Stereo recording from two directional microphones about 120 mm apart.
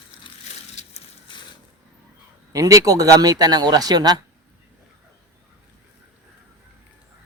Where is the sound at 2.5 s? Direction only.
30° right (ahead or behind).